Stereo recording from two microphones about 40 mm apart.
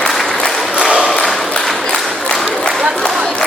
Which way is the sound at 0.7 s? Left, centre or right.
Right.